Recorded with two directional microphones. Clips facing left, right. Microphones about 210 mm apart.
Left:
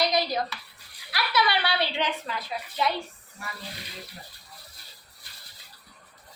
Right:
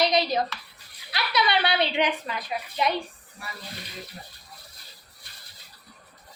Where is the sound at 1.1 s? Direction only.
20° right (ahead or behind).